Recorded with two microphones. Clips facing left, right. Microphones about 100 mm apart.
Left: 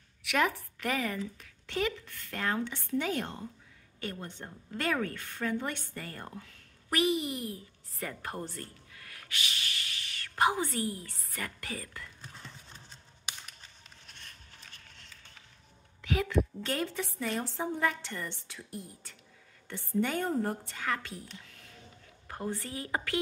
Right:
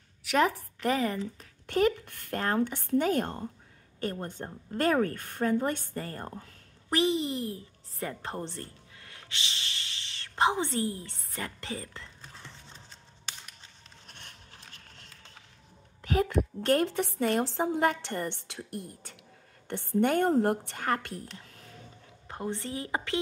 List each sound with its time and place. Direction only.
0.2 s a sound: 35° right (ahead or behind)
0.7 s speech: 30° right (ahead or behind)
1.7 s speech: 45° right (ahead or behind)
2.3 s a woman's voice: 45° right (ahead or behind); by 12.1 s 25° right (ahead or behind)
14.0 s a sound: 60° right (ahead or behind)
16.0 s a woman's voice: 40° right (ahead or behind)
16.7 s a woman's voice: 55° right (ahead or behind)
22.3 s a woman's voice: 25° right (ahead or behind)